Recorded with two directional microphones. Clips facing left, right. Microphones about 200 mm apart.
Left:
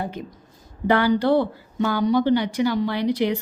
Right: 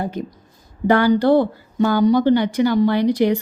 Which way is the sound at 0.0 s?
40° right (ahead or behind).